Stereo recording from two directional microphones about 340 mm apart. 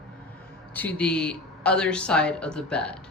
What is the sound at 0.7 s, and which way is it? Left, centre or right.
Speech, centre.